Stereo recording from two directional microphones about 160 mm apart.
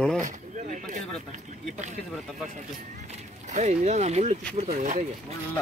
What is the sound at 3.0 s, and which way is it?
Speech, 45° right (ahead or behind).